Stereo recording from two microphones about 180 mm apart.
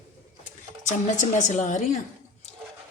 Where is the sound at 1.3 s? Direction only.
45° left (ahead or behind).